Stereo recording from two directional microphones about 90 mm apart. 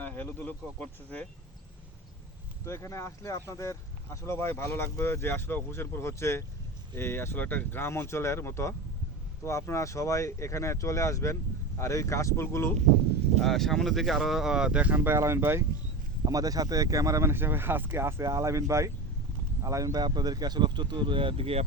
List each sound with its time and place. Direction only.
0.0 s speech: 20° left (ahead or behind)
2.6 s speech: 30° left (ahead or behind)
13.4 s speech: 5° left (ahead or behind); by 14.9 s 10° right (ahead or behind)
14.9 s speech: 25° right (ahead or behind)
16.2 s speech: 45° right (ahead or behind)
20.0 s speech: 50° right (ahead or behind); by 21.6 s 90° right